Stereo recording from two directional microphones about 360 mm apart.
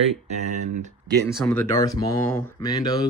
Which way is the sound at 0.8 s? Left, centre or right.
Centre.